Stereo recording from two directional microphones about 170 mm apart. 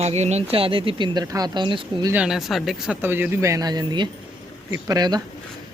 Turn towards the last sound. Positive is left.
turn(degrees=-25)  # may be behind; listen again after turning